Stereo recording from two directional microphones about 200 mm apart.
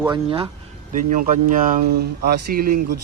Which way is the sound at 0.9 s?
40° right (ahead or behind).